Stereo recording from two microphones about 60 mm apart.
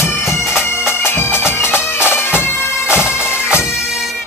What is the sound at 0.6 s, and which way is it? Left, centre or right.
Bagpipes, left.